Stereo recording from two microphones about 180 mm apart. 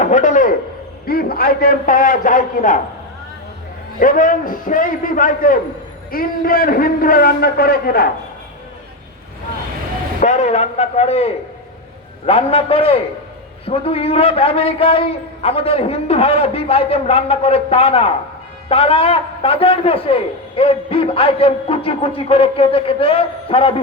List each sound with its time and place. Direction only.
0.0 s a sound: 40° left (ahead or behind)
1.0 s a man's voice: 55° left (ahead or behind)
4.0 s a man's voice: 50° left (ahead or behind)
10.2 s a man's voice: 40° left (ahead or behind)